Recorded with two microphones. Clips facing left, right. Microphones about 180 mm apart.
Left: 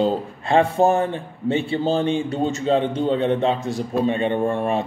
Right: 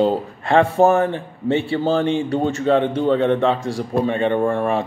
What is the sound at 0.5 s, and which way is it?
Speech, 15° left (ahead or behind).